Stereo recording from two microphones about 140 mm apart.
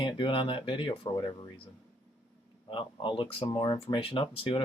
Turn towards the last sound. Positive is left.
turn(degrees=40)  # may be behind; listen again after turning